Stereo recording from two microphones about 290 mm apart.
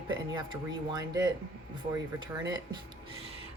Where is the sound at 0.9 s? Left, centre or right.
Centre.